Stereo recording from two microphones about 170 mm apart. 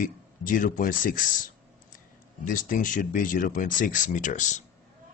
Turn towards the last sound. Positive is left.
turn(degrees=45)  # may be behind; listen again after turning